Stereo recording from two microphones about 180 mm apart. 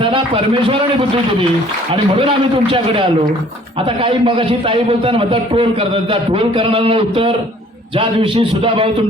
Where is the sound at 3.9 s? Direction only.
30° right (ahead or behind).